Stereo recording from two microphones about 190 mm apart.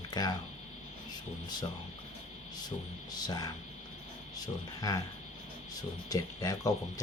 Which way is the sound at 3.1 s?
20° left (ahead or behind).